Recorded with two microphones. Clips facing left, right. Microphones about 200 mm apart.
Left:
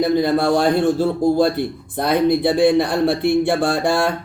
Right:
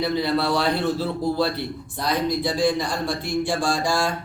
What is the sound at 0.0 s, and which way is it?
A man's voice, 50° left (ahead or behind).